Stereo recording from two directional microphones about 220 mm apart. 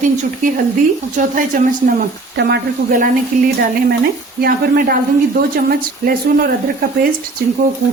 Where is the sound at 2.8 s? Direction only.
35° right (ahead or behind).